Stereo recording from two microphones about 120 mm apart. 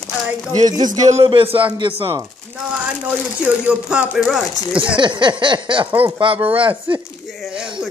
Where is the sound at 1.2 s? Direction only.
50° right (ahead or behind).